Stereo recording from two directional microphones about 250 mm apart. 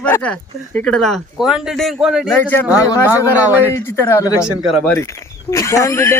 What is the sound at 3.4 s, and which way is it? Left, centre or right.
Speech, centre.